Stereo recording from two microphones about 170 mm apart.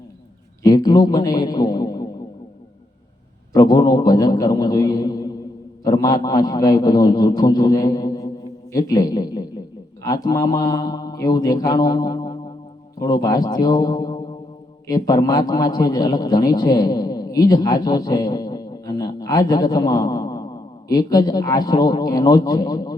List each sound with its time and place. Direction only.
0.6 s a man's voice: 25° left (ahead or behind)
3.5 s a man's voice: 25° left (ahead or behind)